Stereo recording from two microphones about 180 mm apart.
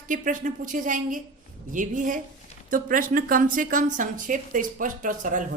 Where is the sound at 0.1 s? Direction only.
45° right (ahead or behind).